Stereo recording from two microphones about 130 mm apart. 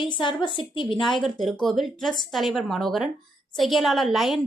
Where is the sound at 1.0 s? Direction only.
Centre (ahead or behind).